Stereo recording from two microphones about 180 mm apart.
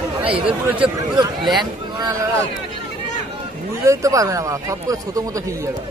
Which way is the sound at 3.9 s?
15° right (ahead or behind).